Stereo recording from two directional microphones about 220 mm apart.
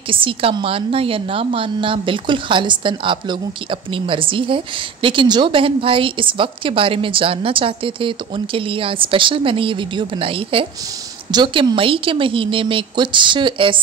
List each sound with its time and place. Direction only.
0.1 s a woman's voice: 25° right (ahead or behind)